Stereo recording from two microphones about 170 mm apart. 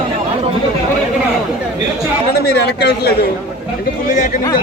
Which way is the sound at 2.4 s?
75° left (ahead or behind).